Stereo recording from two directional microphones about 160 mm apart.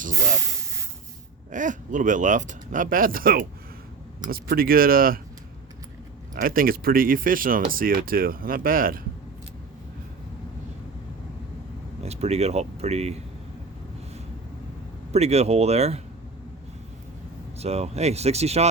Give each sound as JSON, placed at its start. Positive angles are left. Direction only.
{"t": 1.5, "sound": "speech", "side_deg": -55}
{"t": 6.3, "sound": "speech", "side_deg": -65}
{"t": 12.0, "sound": "speech", "side_deg": -40}
{"t": 15.1, "sound": "speech", "side_deg": -40}
{"t": 17.6, "sound": "speech", "side_deg": -40}